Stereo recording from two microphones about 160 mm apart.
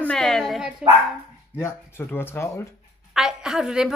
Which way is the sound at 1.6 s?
15° left (ahead or behind).